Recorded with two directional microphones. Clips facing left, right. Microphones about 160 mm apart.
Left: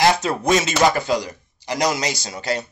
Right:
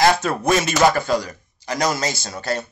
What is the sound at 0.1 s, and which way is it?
A man's voice, 20° left (ahead or behind).